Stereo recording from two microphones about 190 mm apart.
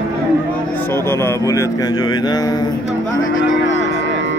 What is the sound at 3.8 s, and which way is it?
Music, 65° left (ahead or behind).